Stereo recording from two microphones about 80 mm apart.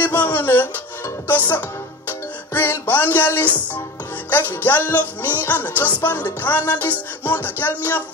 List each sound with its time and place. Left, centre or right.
0.0 s music: left
2.5 s music: left